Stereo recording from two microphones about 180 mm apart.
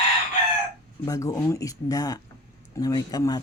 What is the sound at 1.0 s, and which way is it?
Speech, 20° left (ahead or behind).